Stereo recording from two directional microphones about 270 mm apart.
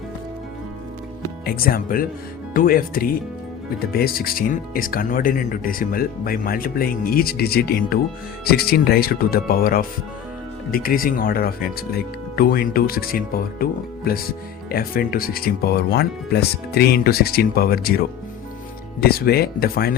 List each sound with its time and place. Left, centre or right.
1.5 s speech: left